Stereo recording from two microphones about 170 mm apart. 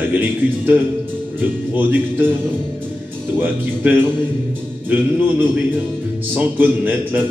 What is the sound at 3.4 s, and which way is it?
Speech, 10° right (ahead or behind).